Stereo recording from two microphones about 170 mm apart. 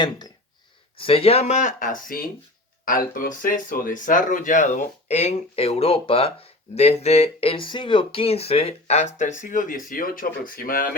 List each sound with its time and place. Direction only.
0.9 s speech: 35° left (ahead or behind); by 10.8 s 60° left (ahead or behind)